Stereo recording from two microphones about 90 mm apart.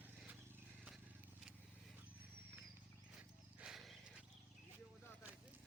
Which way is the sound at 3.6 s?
5° right (ahead or behind).